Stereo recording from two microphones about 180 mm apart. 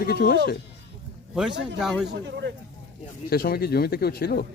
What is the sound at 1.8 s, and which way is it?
Speech, centre (ahead or behind).